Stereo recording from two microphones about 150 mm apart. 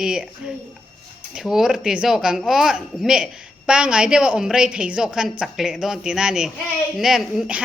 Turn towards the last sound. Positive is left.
turn(degrees=0)  # may be behind; listen again after turning